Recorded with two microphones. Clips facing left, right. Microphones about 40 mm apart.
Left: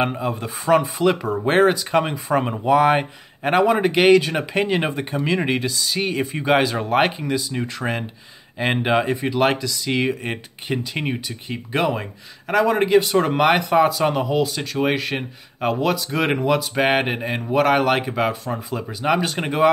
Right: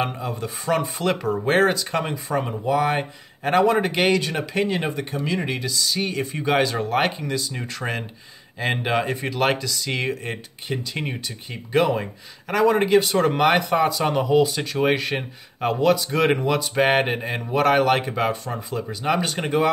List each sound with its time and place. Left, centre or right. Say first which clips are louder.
0.2 s speech: left 3 dB; centre
3.4 s speech: left 1 dB; centre
10.2 s speech: left 3 dB; left